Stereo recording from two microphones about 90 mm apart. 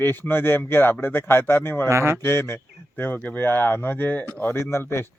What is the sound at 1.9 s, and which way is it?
Speech, 30° right (ahead or behind).